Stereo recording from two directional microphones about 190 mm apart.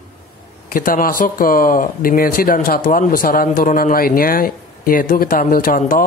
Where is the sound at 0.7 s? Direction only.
45° left (ahead or behind).